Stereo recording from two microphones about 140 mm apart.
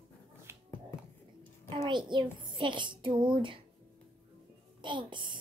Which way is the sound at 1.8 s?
35° right (ahead or behind).